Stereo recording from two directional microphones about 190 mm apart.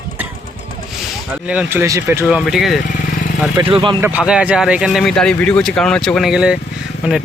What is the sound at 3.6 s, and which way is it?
Speech, 30° right (ahead or behind).